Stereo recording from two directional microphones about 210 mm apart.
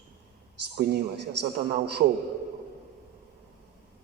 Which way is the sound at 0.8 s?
50° right (ahead or behind).